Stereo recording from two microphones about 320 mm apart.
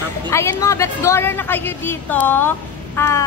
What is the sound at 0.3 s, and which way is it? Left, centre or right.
A woman's voice, centre.